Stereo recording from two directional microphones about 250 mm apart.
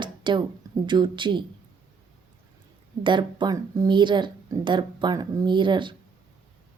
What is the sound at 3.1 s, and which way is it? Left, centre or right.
Speech, centre.